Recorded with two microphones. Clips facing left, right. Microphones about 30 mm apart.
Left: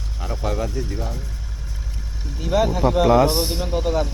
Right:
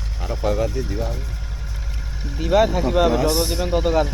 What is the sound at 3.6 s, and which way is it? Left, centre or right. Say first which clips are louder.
Speech: right 3 dB; centre.